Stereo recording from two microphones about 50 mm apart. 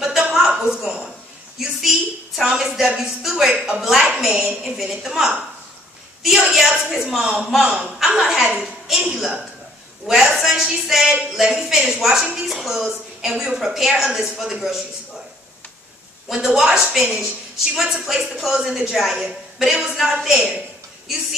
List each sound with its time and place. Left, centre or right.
0.5 s a sound: centre
1.6 s a woman's voice: centre
16.3 s a woman's voice: centre